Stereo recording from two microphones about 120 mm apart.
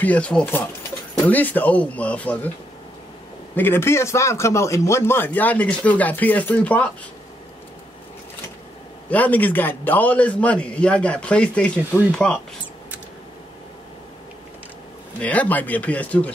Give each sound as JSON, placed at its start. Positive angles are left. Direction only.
{"t": 0.0, "sound": "speech", "side_deg": 10}
{"t": 3.5, "sound": "speech", "side_deg": 15}
{"t": 9.1, "sound": "speech", "side_deg": 15}
{"t": 15.1, "sound": "speech", "side_deg": 10}